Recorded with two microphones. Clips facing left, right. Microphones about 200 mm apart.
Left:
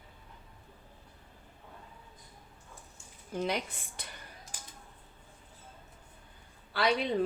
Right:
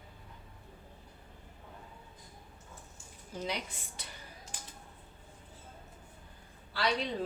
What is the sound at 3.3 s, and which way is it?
Speech, 55° left (ahead or behind).